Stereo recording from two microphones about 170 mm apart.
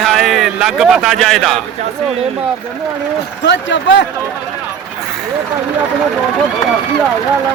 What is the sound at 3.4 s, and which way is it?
Speech, 90° left.